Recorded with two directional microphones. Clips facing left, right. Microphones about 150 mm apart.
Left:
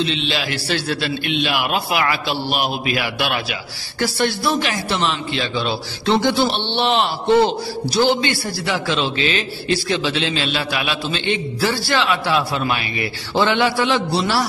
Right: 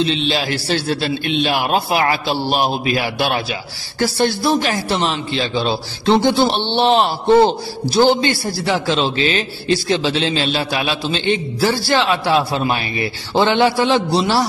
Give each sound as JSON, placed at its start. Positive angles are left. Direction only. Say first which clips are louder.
{"t": 0.0, "sound": "a man's voice", "louder": "right 4 dB", "side_deg": -35}